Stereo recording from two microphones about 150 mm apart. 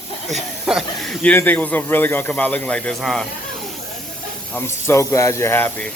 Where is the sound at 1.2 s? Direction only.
10° left (ahead or behind).